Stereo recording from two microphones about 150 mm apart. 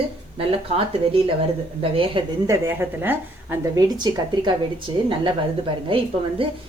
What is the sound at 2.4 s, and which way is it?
A woman's voice, 20° right (ahead or behind).